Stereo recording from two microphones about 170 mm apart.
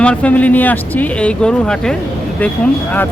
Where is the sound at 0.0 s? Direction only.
5° left (ahead or behind).